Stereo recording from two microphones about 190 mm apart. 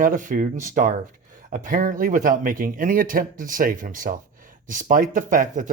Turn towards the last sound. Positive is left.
turn(degrees=-45)  # may be behind; listen again after turning